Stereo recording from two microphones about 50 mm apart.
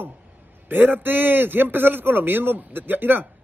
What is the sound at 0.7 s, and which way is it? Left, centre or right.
A man's voice, right.